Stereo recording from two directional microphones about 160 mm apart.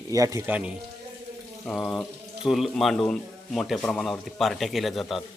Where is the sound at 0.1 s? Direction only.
20° right (ahead or behind).